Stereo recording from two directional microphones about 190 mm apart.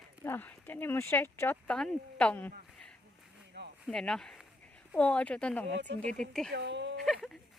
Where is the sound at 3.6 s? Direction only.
65° right (ahead or behind).